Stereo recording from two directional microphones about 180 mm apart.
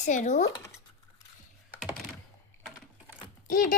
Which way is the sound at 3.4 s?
50° left (ahead or behind).